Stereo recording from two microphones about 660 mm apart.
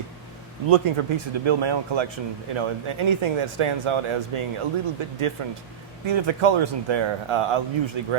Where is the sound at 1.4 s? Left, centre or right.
Right.